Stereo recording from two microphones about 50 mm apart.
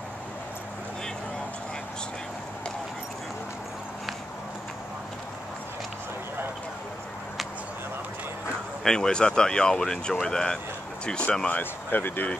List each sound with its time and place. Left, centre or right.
8.8 s speech: centre
11.4 s speech: left